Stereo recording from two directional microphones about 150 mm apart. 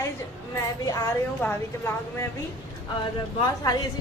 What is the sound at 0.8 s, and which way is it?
A woman's voice, 20° left (ahead or behind).